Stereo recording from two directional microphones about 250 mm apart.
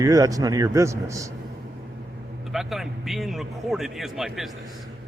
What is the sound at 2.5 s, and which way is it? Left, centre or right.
A man's voice, centre.